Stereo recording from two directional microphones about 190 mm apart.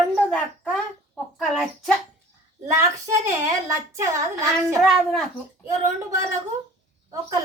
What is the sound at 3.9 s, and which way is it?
Speech, 15° right (ahead or behind).